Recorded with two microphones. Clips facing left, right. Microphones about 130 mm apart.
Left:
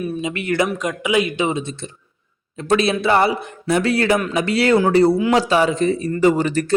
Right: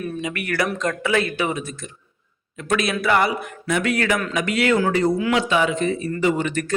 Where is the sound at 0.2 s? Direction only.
20° left (ahead or behind).